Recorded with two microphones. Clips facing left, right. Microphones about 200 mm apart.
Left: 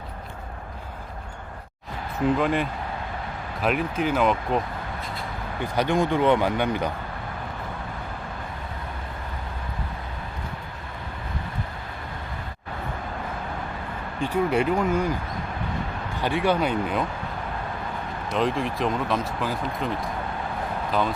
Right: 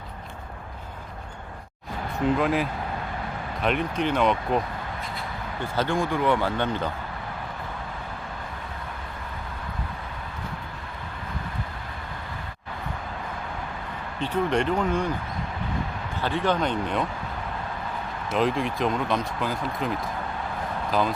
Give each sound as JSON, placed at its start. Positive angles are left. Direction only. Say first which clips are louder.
{"t": 2.4, "sound": "speech", "louder": "even", "side_deg": 0}
{"t": 5.6, "sound": "speech", "louder": "left 3 dB", "side_deg": 15}
{"t": 14.2, "sound": "speech", "louder": "left 2 dB", "side_deg": 10}
{"t": 16.2, "sound": "speech", "louder": "left 2 dB", "side_deg": 10}
{"t": 18.3, "sound": "speech", "louder": "even", "side_deg": 0}